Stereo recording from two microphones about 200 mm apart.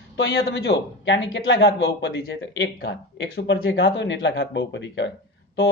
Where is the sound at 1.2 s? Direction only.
70° left (ahead or behind).